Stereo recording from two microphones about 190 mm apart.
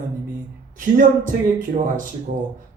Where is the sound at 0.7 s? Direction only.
45° right (ahead or behind).